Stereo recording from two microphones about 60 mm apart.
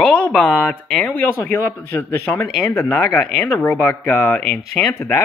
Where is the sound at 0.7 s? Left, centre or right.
Centre.